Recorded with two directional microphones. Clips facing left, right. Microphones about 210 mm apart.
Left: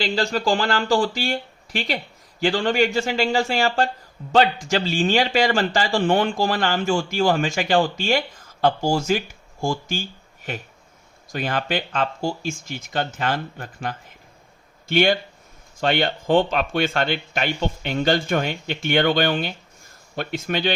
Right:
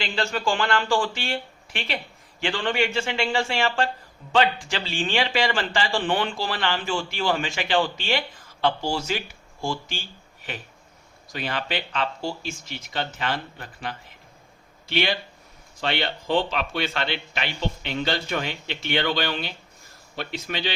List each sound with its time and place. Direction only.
0.0 s a man's voice: 35° left (ahead or behind)